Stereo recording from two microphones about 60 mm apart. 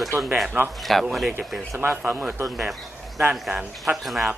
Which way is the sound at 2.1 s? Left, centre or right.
Right.